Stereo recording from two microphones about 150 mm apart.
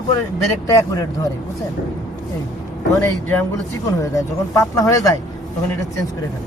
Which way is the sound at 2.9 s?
20° left (ahead or behind).